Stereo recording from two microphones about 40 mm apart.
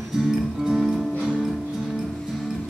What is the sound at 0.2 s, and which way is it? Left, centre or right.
Music, centre.